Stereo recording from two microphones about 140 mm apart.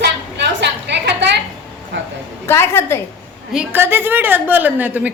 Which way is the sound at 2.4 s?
20° left (ahead or behind).